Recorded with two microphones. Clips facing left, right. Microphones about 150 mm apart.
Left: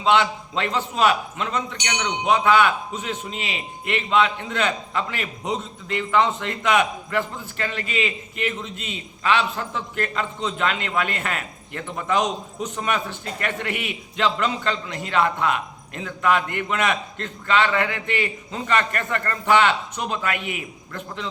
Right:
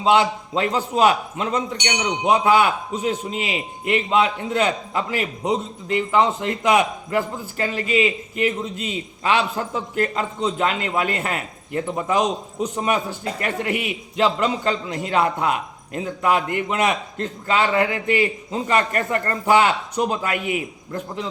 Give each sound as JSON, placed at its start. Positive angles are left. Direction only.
{"t": 0.5, "sound": "a man's voice", "side_deg": -40}